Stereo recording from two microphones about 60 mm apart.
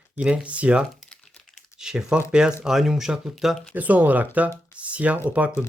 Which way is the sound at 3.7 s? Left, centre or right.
Right.